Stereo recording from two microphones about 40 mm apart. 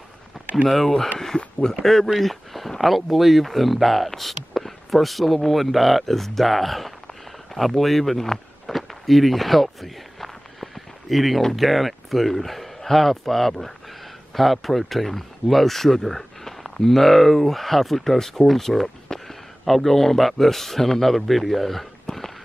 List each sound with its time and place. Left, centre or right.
0.7 s speech: centre
7.5 s walk: centre
11.5 s speech: centre
22.1 s a sound: centre